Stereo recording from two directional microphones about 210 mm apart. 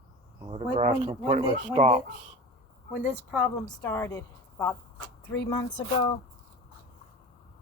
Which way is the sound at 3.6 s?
10° left (ahead or behind).